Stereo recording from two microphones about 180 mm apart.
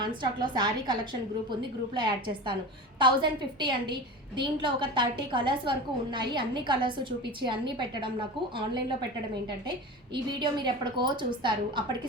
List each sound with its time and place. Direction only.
0.0 s a woman's voice: 25° right (ahead or behind)
2.0 s a woman's voice: 25° right (ahead or behind)
10.2 s a woman's voice: 25° right (ahead or behind)